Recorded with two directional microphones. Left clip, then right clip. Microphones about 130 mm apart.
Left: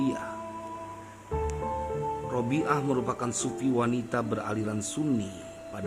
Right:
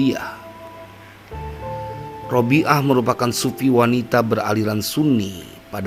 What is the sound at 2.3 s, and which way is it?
A man's voice, 40° right (ahead or behind).